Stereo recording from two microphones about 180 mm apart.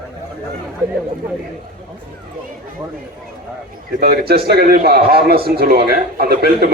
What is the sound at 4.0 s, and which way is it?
A man's voice, 60° right (ahead or behind).